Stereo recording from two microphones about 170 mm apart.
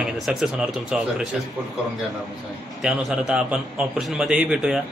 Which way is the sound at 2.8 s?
5° right (ahead or behind).